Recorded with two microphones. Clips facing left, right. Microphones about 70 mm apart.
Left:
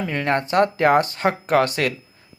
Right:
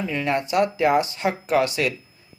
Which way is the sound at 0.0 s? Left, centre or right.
Left.